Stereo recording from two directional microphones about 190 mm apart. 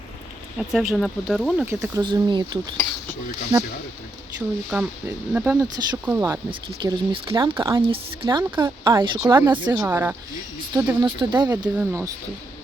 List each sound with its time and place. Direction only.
0.7 s speech: centre (ahead or behind)
1.6 s speech: 10° right (ahead or behind)
2.0 s speech: 25° right (ahead or behind)
4.7 s speech: 5° right (ahead or behind)
6.5 s speech: 25° right (ahead or behind)
9.7 s speech: 10° right (ahead or behind)
10.8 s speech: 25° right (ahead or behind)
11.4 s speech: 15° right (ahead or behind)